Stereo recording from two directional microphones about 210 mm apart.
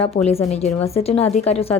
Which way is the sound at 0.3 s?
30° left (ahead or behind).